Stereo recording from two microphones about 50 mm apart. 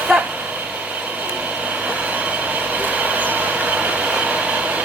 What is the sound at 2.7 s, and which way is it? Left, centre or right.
Vehicle, right.